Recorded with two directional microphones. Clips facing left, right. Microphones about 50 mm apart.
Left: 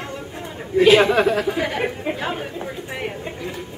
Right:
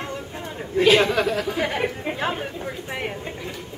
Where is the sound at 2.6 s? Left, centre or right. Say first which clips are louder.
Left 1 dB; centre.